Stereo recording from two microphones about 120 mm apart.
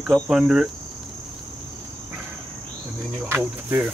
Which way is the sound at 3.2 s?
15° right (ahead or behind).